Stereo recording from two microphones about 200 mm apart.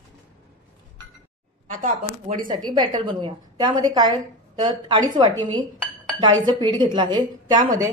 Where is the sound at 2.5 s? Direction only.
20° right (ahead or behind).